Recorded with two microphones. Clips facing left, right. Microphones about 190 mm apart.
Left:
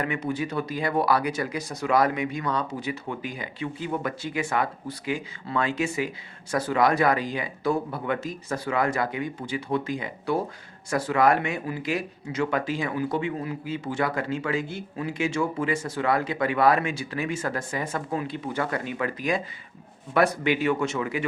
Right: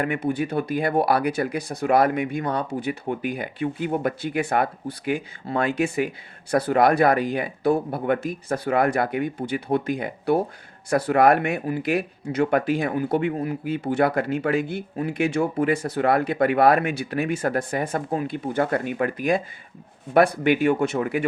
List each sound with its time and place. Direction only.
0.0 s speech: 55° right (ahead or behind)